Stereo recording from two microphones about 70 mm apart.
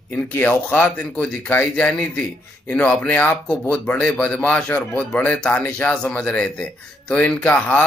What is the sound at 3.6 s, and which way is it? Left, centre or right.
Speech, left.